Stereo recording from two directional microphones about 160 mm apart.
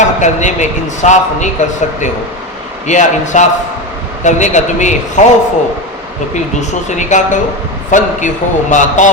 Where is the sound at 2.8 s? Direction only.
50° left (ahead or behind).